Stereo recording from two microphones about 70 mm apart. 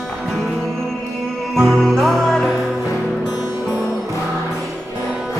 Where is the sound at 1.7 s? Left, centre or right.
Centre.